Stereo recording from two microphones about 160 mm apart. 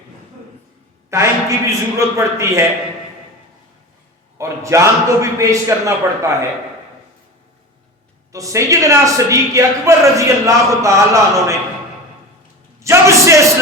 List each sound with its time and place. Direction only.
1.1 s a man's voice: 15° right (ahead or behind)
4.4 s a woman's voice: 20° right (ahead or behind)
8.3 s a woman's voice: 20° right (ahead or behind)
12.8 s a sound: 20° right (ahead or behind)